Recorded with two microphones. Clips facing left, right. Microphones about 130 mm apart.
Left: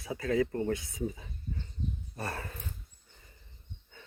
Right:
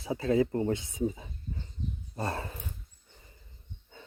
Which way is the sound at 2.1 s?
25° right (ahead or behind).